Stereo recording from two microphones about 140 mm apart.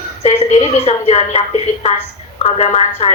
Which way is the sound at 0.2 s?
45° left (ahead or behind).